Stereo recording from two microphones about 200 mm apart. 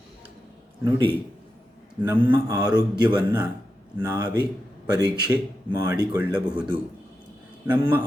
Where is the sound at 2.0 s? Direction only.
10° right (ahead or behind).